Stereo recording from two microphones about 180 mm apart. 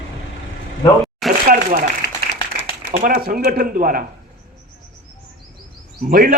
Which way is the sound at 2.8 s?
55° right (ahead or behind).